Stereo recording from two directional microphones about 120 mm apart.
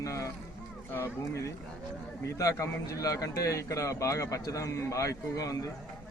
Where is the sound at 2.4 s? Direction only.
30° left (ahead or behind).